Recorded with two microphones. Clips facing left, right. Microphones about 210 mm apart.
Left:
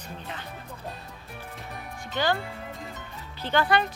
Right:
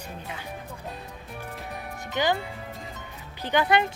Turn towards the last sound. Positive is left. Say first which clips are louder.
# right 1 dB
turn(degrees=-20)  # may be behind; listen again after turning